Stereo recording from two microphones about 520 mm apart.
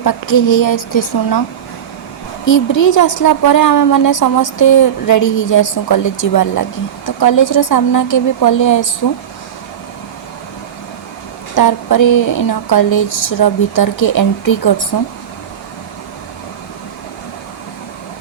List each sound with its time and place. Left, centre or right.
0.0 s a woman's voice: left
2.5 s a woman's voice: left
11.5 s a woman's voice: left
13.7 s a woman's voice: left